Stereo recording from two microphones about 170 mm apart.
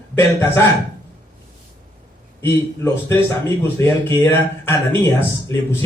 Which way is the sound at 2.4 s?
15° left (ahead or behind).